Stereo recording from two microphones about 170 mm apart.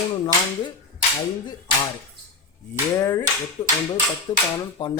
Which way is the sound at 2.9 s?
20° left (ahead or behind).